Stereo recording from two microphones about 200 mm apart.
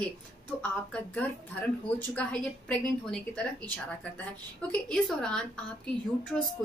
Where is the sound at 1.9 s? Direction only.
5° left (ahead or behind).